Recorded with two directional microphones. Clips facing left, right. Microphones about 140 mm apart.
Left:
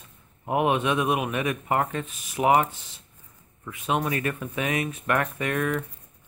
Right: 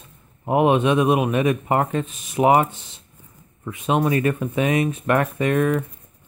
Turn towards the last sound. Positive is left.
turn(degrees=-30)  # may be behind; listen again after turning